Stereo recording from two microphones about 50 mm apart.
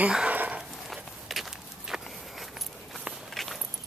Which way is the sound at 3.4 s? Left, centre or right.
Centre.